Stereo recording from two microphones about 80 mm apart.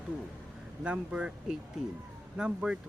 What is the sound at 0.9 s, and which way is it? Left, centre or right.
Speech, centre.